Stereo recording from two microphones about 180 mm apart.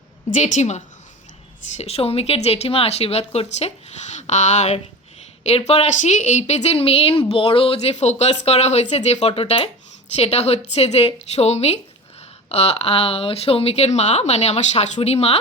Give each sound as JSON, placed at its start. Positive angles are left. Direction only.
{"t": 0.3, "sound": "a woman's voice", "side_deg": 45}